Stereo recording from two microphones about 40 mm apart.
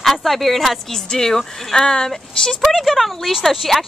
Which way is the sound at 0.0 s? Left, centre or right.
Centre.